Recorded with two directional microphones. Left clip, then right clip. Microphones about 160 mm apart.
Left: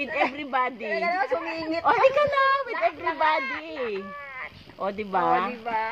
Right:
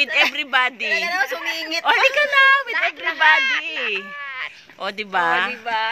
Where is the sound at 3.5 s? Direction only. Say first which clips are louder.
Right 8 dB; 5° left (ahead or behind).